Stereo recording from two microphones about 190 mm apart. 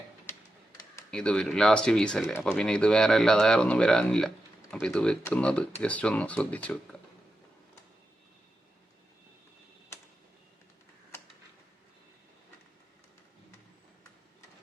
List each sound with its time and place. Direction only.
1.1 s speech: 5° left (ahead or behind)